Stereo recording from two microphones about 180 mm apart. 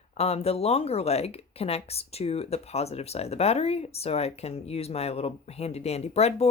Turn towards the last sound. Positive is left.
turn(degrees=35)  # may be behind; listen again after turning